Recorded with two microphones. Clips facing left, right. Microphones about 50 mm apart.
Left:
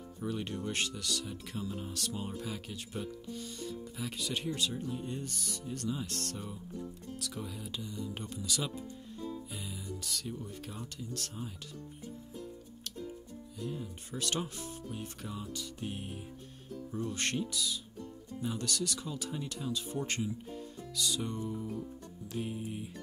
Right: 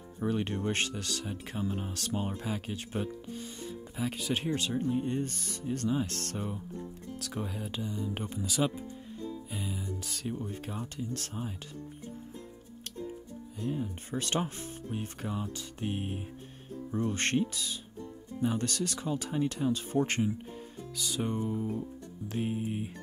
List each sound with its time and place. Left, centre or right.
0.2 s speech: right
13.6 s speech: right